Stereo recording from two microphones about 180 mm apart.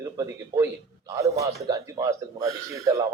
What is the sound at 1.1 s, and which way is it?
A man's voice, 15° right (ahead or behind).